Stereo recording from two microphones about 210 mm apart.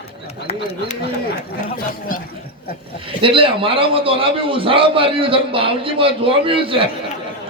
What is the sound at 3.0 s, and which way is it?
A man's voice, 25° right (ahead or behind).